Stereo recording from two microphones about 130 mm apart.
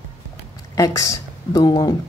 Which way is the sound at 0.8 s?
25° left (ahead or behind).